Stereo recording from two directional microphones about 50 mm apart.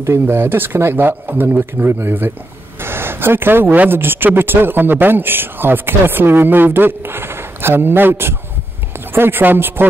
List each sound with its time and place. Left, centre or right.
0.3 s a man's voice: right
2.8 s a sound: right
3.6 s speech: right
4.0 s a man's voice: right